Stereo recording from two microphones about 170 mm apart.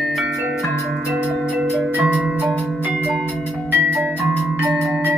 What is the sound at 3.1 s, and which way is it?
Music, 5° left (ahead or behind).